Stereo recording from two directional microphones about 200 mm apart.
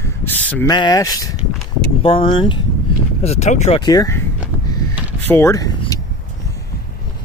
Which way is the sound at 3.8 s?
15° left (ahead or behind).